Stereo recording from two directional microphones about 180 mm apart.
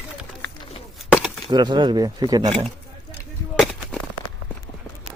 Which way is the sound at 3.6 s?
5° left (ahead or behind).